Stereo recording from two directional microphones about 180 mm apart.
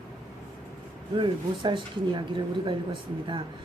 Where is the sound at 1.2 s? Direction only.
25° right (ahead or behind).